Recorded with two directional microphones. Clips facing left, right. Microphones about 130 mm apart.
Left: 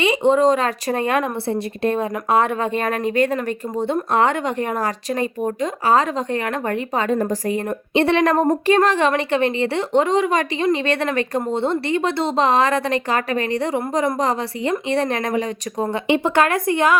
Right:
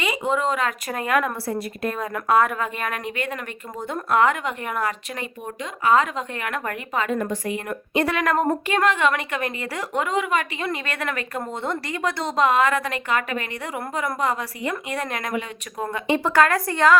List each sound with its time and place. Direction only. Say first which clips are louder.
0.0 s a woman's voice: left 8 dB; 30° left (ahead or behind)
16.0 s a woman's voice: left 1 dB; 20° left (ahead or behind)